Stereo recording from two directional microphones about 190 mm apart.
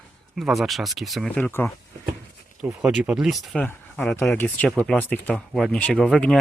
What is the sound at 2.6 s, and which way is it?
Speech, 5° right (ahead or behind).